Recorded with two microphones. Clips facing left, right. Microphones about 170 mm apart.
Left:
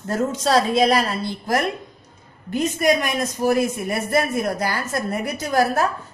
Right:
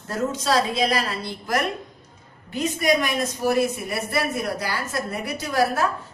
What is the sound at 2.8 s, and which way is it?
A man's voice, 45° left (ahead or behind).